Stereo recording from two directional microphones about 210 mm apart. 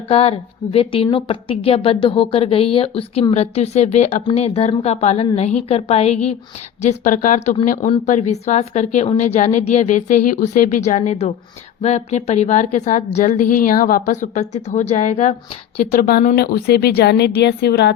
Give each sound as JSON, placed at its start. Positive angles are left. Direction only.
{"t": 0.1, "sound": "a woman's voice", "side_deg": 30}